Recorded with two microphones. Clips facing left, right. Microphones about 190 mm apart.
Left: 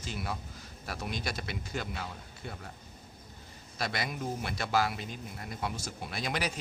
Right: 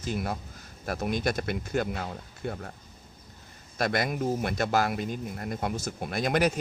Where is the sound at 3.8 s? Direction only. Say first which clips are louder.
Right 7 dB; 50° right (ahead or behind).